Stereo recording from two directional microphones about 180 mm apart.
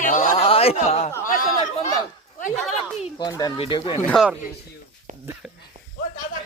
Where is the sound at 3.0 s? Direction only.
25° left (ahead or behind).